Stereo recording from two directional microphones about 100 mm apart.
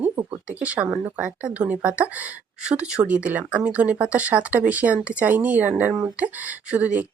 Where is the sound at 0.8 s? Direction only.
25° right (ahead or behind).